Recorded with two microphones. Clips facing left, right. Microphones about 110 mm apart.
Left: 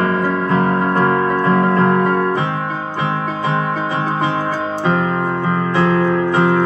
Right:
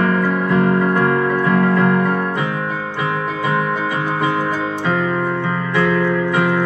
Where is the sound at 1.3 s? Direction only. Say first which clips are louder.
Left 1 dB; 35° left (ahead or behind).